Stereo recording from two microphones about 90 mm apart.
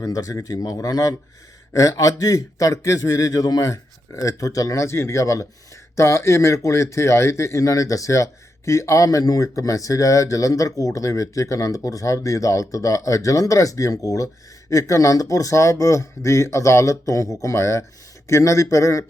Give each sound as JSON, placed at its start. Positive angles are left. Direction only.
{"t": 0.0, "sound": "speech", "side_deg": 40}